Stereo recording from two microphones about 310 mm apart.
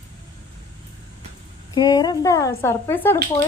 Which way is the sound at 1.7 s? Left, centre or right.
Centre.